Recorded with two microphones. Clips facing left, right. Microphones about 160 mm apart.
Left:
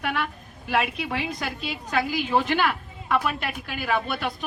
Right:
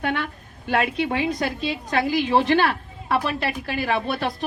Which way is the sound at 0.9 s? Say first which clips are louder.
Right 6 dB; 30° right (ahead or behind).